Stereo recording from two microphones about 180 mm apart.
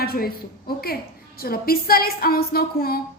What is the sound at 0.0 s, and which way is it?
Speech, 55° left (ahead or behind).